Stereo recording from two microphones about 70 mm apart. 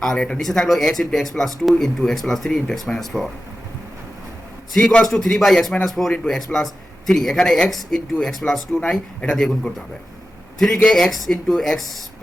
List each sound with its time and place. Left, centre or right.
0.0 s speech: centre
4.8 s speech: centre
5.1 s speech: centre
8.8 s speech: centre
10.8 s speech: centre